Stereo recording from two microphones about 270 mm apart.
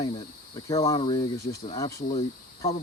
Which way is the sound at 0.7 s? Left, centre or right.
Centre.